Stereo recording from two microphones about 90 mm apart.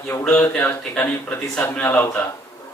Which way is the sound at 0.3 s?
10° left (ahead or behind).